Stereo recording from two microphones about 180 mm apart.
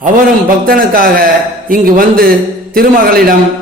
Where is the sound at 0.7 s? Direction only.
55° right (ahead or behind).